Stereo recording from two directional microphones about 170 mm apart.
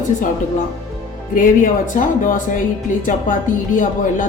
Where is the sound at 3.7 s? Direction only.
50° left (ahead or behind).